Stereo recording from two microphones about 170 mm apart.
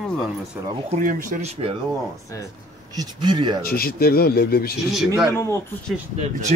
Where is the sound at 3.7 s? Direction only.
60° left (ahead or behind).